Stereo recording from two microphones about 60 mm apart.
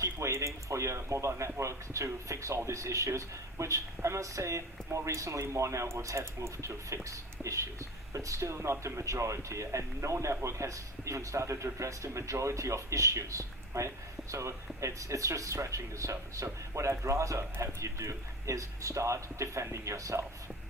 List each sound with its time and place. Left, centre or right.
0.0 s speech: right